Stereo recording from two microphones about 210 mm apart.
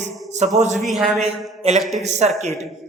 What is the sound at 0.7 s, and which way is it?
A man's voice, centre (ahead or behind).